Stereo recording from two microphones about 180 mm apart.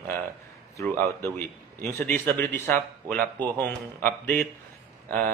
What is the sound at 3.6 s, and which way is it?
Speech, 10° left (ahead or behind).